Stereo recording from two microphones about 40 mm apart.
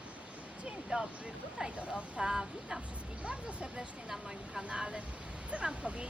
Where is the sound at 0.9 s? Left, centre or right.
Right.